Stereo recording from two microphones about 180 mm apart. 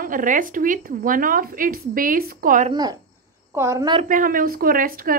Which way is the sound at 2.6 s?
20° right (ahead or behind).